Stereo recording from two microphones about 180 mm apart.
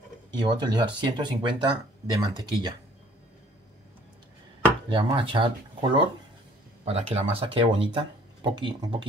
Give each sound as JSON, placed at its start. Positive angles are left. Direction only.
{"t": 0.4, "sound": "speech", "side_deg": -25}
{"t": 4.8, "sound": "speech", "side_deg": -30}